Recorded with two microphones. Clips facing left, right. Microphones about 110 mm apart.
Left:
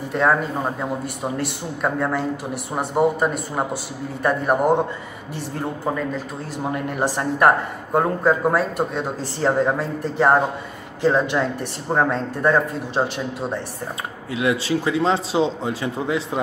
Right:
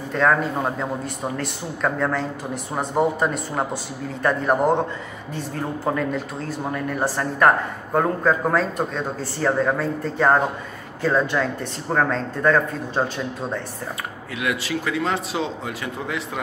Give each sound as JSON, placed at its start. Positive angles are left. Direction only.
{"t": 0.1, "sound": "speech", "side_deg": 15}
{"t": 1.8, "sound": "speech", "side_deg": 15}
{"t": 5.9, "sound": "speech", "side_deg": 0}
{"t": 6.7, "sound": "speech", "side_deg": 20}
{"t": 14.3, "sound": "speech", "side_deg": 25}